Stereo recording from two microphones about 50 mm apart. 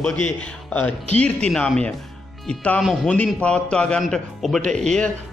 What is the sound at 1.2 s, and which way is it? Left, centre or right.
Speech, left.